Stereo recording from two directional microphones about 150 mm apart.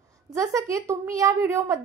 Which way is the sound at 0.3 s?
20° right (ahead or behind).